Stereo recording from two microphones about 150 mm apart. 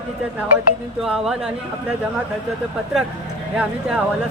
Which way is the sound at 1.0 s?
5° right (ahead or behind).